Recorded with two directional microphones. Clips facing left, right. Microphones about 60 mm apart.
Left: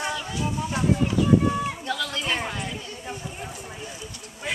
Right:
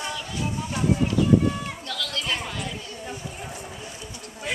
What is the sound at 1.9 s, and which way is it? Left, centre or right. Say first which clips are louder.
Chatter: even; centre.